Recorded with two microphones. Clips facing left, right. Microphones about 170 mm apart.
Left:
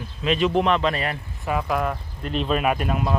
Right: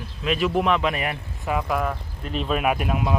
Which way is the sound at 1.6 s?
Centre (ahead or behind).